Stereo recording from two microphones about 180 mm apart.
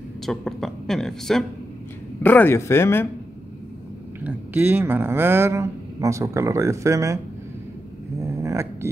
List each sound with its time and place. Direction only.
0.2 s speech: centre (ahead or behind)
4.2 s speech: 10° right (ahead or behind)
8.2 s a sound: 15° right (ahead or behind)